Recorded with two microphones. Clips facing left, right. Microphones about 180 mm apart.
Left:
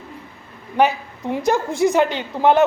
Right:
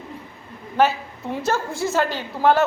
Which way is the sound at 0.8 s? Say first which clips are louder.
Left 2 dB; 15° left (ahead or behind).